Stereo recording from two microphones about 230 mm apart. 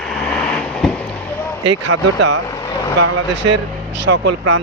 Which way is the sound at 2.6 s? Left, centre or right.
Centre.